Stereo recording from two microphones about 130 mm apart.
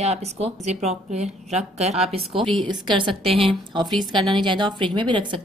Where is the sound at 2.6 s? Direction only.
35° right (ahead or behind).